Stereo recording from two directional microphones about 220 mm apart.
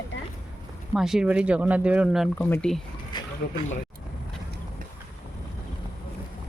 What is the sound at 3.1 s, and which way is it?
Speech, 20° left (ahead or behind).